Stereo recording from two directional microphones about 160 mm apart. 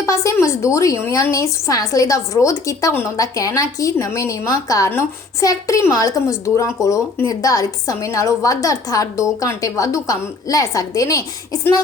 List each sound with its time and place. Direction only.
0.0 s a woman's voice: 20° left (ahead or behind)